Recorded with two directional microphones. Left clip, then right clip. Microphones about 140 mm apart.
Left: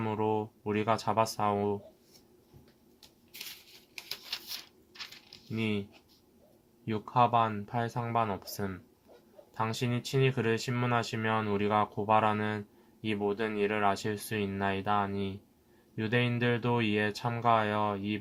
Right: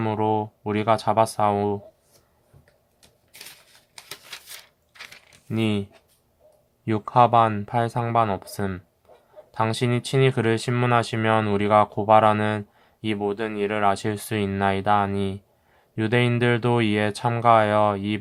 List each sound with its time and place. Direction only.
0.0 s speech: 30° right (ahead or behind)
5.5 s speech: 40° right (ahead or behind)
6.8 s speech: 45° right (ahead or behind)